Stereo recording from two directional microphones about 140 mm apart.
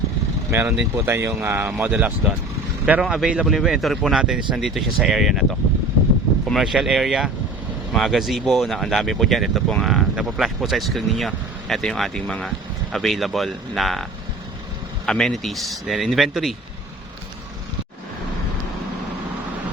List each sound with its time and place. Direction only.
0.5 s speech: 15° right (ahead or behind); by 14.0 s centre (ahead or behind)
15.0 s speech: 5° left (ahead or behind)